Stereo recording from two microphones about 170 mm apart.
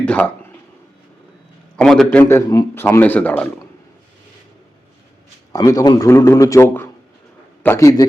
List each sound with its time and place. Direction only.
0.0 s a sound: 10° left (ahead or behind)
1.7 s a man's voice: 5° left (ahead or behind)
5.5 s a man's voice: 20° left (ahead or behind)